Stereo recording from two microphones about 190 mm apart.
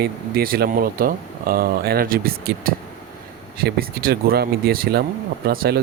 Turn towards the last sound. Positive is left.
turn(degrees=-55)  # may be behind; listen again after turning